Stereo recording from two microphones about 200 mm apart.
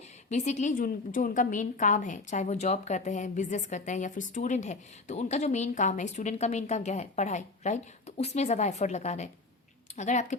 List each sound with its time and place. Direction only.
0.3 s a woman's voice: 35° left (ahead or behind)